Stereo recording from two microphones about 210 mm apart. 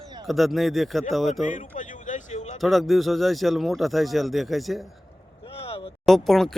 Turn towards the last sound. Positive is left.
turn(degrees=0)  # may be behind; listen again after turning